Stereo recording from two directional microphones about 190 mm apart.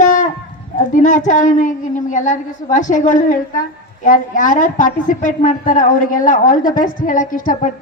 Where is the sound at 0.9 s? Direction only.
40° left (ahead or behind).